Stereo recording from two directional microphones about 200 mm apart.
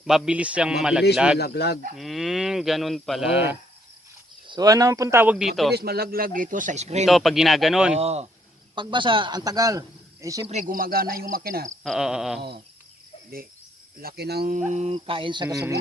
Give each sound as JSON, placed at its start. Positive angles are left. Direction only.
{"t": 0.0, "sound": "speech", "side_deg": -5}
{"t": 1.4, "sound": "speech", "side_deg": 55}
{"t": 2.0, "sound": "speech", "side_deg": 0}
{"t": 4.4, "sound": "speech", "side_deg": -20}
{"t": 5.7, "sound": "speech", "side_deg": -50}
{"t": 7.0, "sound": "speech", "side_deg": 0}
{"t": 7.9, "sound": "a man's voice", "side_deg": -30}
{"t": 10.4, "sound": "speech", "side_deg": -35}
{"t": 11.8, "sound": "speech", "side_deg": 0}
{"t": 12.4, "sound": "a sound", "side_deg": -55}
{"t": 14.0, "sound": "speech", "side_deg": -50}
{"t": 14.9, "sound": "speech", "side_deg": -25}
{"t": 15.4, "sound": "speech", "side_deg": -10}